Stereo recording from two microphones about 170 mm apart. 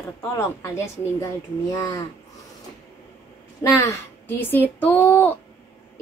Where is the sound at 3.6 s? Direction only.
15° left (ahead or behind).